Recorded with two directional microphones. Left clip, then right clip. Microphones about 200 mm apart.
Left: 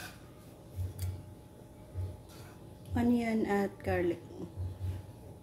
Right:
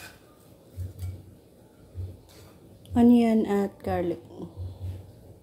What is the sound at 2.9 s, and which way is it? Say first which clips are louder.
A woman's voice: right 10 dB; 30° right (ahead or behind).